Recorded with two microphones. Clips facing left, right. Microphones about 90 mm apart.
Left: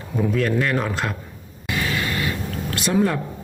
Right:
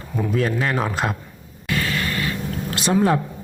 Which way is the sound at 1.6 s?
20° left (ahead or behind).